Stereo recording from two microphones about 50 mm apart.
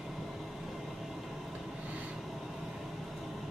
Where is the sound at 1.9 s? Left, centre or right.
Right.